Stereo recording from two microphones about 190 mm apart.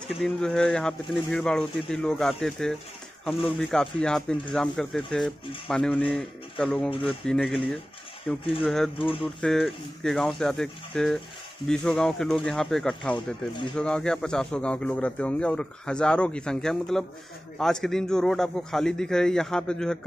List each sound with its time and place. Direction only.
0.2 s speech: centre (ahead or behind)
8.9 s speech: 30° left (ahead or behind)
9.2 s speech: centre (ahead or behind)